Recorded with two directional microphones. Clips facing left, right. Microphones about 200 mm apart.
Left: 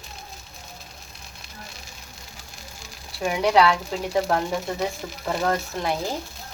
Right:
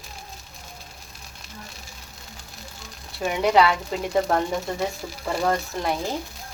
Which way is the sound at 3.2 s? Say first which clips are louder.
Even; 5° right (ahead or behind).